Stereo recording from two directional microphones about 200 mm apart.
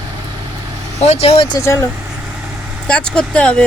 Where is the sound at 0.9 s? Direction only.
30° left (ahead or behind).